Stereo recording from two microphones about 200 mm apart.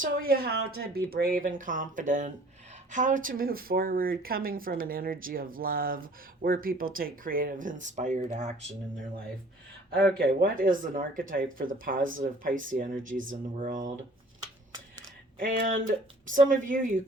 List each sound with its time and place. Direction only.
0.0 s speech: 45° right (ahead or behind)
10.2 s speech: 45° right (ahead or behind)
15.4 s speech: 45° right (ahead or behind)